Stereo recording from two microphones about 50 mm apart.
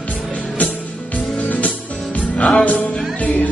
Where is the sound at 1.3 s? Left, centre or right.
Left.